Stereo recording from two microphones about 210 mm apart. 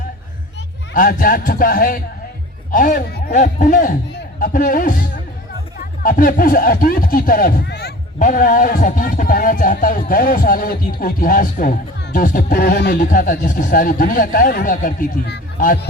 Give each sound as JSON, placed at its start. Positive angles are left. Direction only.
{"t": 0.9, "sound": "speech", "side_deg": 40}
{"t": 8.2, "sound": "speech", "side_deg": 40}